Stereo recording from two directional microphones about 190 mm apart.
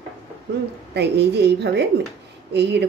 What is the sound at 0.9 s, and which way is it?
Speech, 60° right (ahead or behind).